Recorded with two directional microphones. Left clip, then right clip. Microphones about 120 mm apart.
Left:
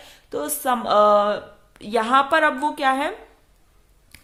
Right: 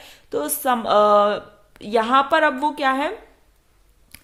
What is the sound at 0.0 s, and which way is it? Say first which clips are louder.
A woman's voice: right 3 dB; 25° right (ahead or behind).